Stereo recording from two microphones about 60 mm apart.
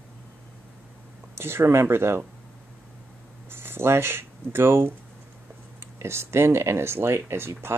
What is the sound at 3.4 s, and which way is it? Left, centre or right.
Speech, right.